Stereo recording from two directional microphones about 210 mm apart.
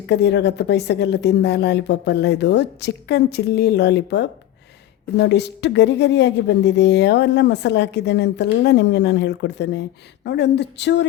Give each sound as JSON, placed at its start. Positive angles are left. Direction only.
{"t": 0.1, "sound": "a woman's voice", "side_deg": 55}